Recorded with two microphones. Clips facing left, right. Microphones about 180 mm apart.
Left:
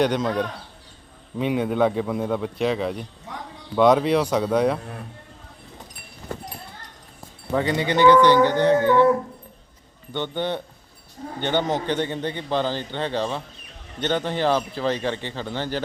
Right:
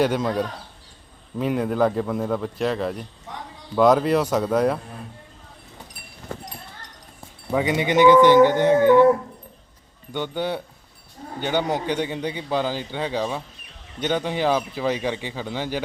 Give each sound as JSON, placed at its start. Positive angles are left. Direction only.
{"t": 0.0, "sound": "a man's voice", "side_deg": -5}
{"t": 7.5, "sound": "a man's voice", "side_deg": -15}
{"t": 10.1, "sound": "a man's voice", "side_deg": -10}